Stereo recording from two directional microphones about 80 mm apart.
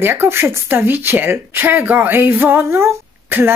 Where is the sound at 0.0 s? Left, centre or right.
Right.